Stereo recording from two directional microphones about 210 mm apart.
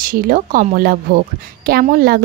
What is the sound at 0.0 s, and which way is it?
A woman's voice, 40° right (ahead or behind).